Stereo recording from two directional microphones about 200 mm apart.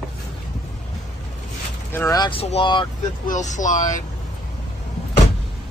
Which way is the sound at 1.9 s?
15° left (ahead or behind).